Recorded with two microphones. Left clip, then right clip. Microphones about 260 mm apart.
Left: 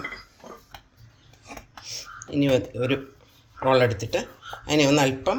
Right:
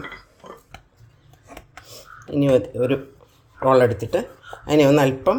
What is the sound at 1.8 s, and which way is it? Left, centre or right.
Computer keyboard, right.